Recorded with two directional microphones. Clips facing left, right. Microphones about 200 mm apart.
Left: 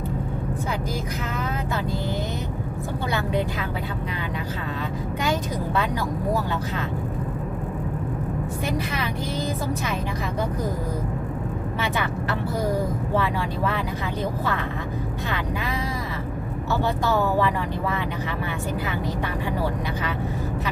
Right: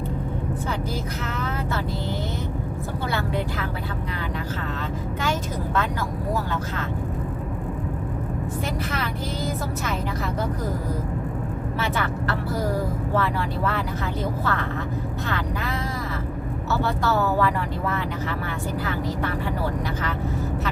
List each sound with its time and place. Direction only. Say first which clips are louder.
3.1 s speech: left 2 dB; 15° left (ahead or behind)
5.2 s speech: left 2 dB; 15° left (ahead or behind)
11.8 s speech: even; 15° left (ahead or behind)
16.8 s speech: left 1 dB; 15° left (ahead or behind)